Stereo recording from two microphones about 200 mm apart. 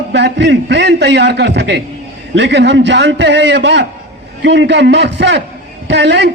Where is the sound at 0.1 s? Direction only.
60° right (ahead or behind).